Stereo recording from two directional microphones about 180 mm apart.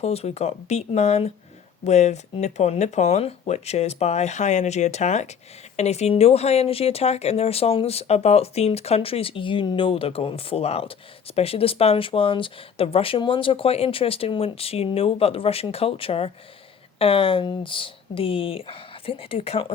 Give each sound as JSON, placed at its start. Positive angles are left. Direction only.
{"t": 0.0, "sound": "speech", "side_deg": 35}